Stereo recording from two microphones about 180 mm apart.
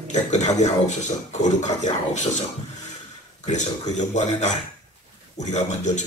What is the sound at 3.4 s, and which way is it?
Speech, 40° left (ahead or behind).